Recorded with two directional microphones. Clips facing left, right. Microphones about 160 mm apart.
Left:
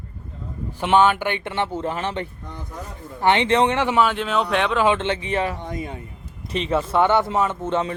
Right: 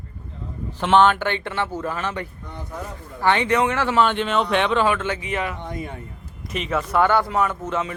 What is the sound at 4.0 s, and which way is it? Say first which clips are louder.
Speech: right 3 dB; centre (ahead or behind).